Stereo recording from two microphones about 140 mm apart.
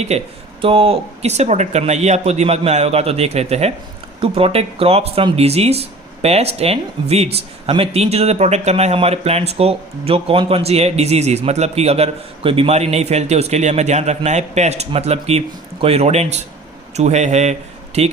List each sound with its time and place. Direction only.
0.1 s speech: 50° right (ahead or behind)